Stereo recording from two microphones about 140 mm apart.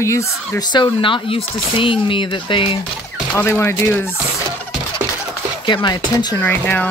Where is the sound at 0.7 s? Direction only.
35° left (ahead or behind).